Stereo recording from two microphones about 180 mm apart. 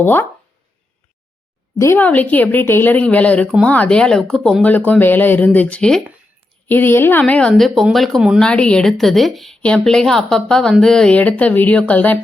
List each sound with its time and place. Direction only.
0.0 s speech: 10° left (ahead or behind)
1.8 s speech: 10° left (ahead or behind)